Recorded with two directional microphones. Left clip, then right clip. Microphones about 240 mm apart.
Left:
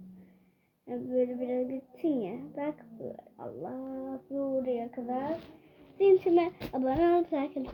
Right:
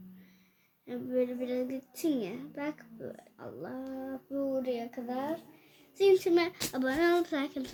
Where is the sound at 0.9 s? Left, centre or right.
Centre.